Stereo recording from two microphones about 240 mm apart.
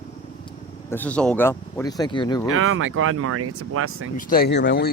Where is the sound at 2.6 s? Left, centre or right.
Right.